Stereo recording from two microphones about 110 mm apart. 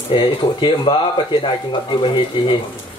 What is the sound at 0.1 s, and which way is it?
Speech, 50° left (ahead or behind).